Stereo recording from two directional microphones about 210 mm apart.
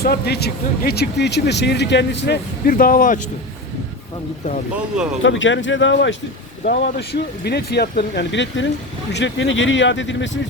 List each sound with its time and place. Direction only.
0.0 s speech: 50° left (ahead or behind)
4.7 s speech: 5° right (ahead or behind)
5.2 s speech: 65° left (ahead or behind)